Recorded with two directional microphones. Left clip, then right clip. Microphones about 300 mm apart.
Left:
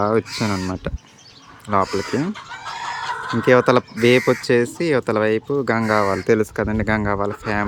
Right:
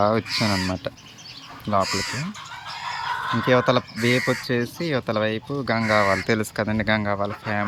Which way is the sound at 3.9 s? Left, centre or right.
Left.